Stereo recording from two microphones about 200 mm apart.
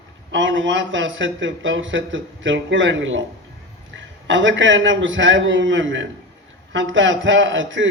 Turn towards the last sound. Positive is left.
turn(degrees=-70)  # may be behind; listen again after turning